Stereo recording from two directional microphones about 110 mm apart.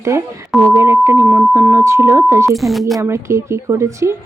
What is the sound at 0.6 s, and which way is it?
A woman's voice, 25° right (ahead or behind).